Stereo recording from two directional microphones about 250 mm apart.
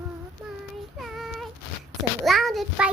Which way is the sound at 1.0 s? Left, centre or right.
Centre.